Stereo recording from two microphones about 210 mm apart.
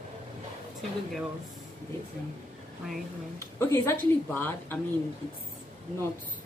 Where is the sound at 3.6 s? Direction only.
10° left (ahead or behind).